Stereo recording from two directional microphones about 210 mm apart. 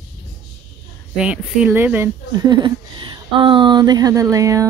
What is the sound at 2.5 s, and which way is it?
A woman's voice, 20° right (ahead or behind).